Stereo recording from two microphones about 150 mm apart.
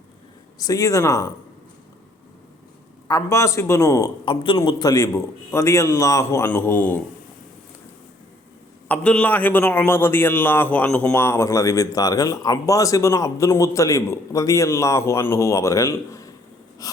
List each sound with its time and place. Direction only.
0.6 s a man's voice: 20° left (ahead or behind)
3.1 s a man's voice: 20° left (ahead or behind)
4.3 s a man's voice: 30° left (ahead or behind); by 7.0 s 15° left (ahead or behind)
8.9 s a man's voice: 10° left (ahead or behind)